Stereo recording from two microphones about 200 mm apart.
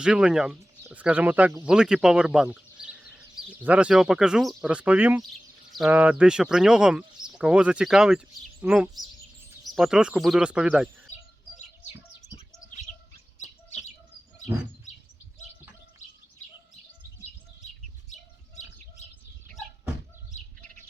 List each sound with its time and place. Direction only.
0.0 s speech: 5° right (ahead or behind)
2.8 s chicken: 5° right (ahead or behind)
3.6 s speech: 5° right (ahead or behind)
11.5 s bird: 35° left (ahead or behind)
13.4 s chirp: 35° left (ahead or behind)
18.1 s bird: 35° left (ahead or behind)